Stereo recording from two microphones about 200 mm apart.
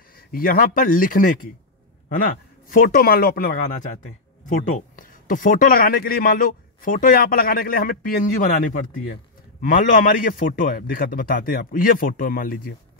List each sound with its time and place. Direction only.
0.3 s speech: 45° left (ahead or behind)
2.7 s speech: 45° left (ahead or behind)